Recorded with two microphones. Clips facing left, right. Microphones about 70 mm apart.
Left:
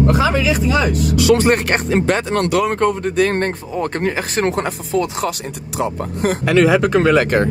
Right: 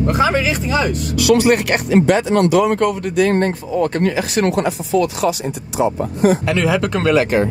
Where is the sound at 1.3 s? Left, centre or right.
Left.